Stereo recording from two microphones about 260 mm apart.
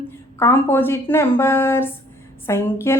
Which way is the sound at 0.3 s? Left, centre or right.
Centre.